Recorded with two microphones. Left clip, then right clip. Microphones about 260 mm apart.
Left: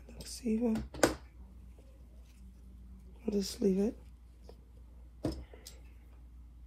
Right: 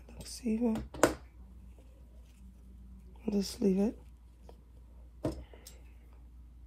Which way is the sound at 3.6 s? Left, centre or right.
Right.